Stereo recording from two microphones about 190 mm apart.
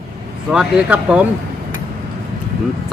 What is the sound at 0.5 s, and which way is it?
Speech, 5° right (ahead or behind).